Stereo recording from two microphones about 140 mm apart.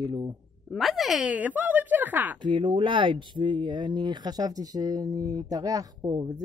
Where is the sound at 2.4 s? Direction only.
35° right (ahead or behind).